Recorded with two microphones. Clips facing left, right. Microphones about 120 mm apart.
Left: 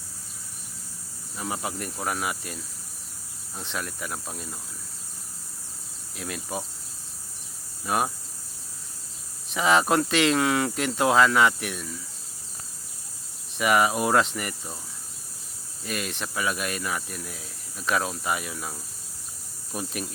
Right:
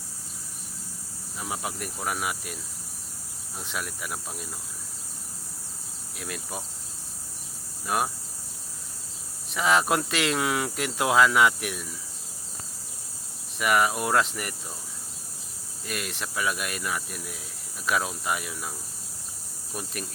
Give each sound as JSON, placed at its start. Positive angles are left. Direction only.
{"t": 1.4, "sound": "speech", "side_deg": 0}
{"t": 3.6, "sound": "speech", "side_deg": -5}
{"t": 6.1, "sound": "speech", "side_deg": 0}
{"t": 7.9, "sound": "speech", "side_deg": 0}
{"t": 9.5, "sound": "speech", "side_deg": 0}
{"t": 13.6, "sound": "speech", "side_deg": 0}
{"t": 15.9, "sound": "speech", "side_deg": 0}
{"t": 19.7, "sound": "speech", "side_deg": 0}